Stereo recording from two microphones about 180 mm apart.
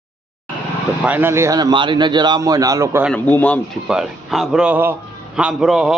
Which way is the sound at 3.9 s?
5° right (ahead or behind).